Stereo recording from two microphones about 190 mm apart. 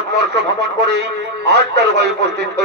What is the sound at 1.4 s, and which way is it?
Speech, 65° right (ahead or behind).